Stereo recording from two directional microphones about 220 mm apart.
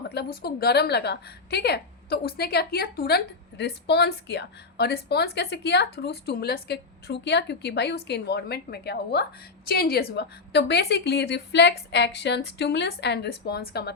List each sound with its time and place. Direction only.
0.1 s a woman's voice: 45° left (ahead or behind)